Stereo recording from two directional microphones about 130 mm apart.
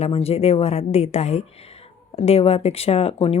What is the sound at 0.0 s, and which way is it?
A woman's voice, 50° left (ahead or behind).